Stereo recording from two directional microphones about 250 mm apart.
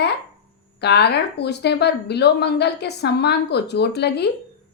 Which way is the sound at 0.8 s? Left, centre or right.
Left.